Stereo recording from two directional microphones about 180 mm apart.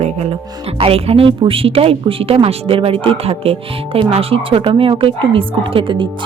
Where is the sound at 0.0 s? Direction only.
35° right (ahead or behind).